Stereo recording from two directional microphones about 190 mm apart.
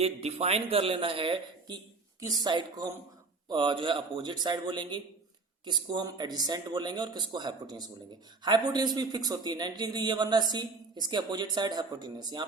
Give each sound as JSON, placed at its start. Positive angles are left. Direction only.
{"t": 0.0, "sound": "a man's voice", "side_deg": -35}